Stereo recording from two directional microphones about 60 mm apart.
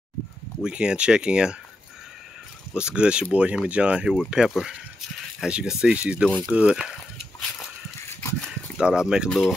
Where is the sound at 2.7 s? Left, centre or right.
Centre.